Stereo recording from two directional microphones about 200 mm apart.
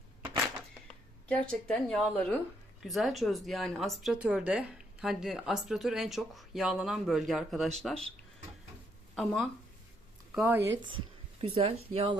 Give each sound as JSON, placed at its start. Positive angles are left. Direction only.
{"t": 1.5, "sound": "a woman's voice", "side_deg": 5}
{"t": 9.1, "sound": "a woman's voice", "side_deg": 0}
{"t": 10.3, "sound": "speech", "side_deg": -10}
{"t": 10.6, "sound": "speech", "side_deg": -70}
{"t": 11.3, "sound": "speech", "side_deg": -30}